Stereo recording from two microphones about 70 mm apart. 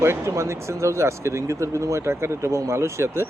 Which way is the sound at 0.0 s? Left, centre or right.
Right.